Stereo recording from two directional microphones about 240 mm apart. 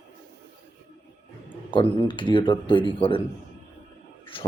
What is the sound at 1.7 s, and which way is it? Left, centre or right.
Speech, centre.